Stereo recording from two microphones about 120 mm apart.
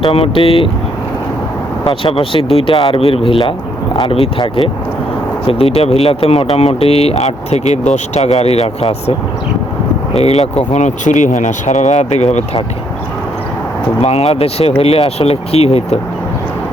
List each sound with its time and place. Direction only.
0.0 s speech: 50° left (ahead or behind)
1.9 s speech: 45° left (ahead or behind)
10.2 s speech: 60° left (ahead or behind)
10.7 s speech: 80° left
14.0 s speech: 60° left (ahead or behind)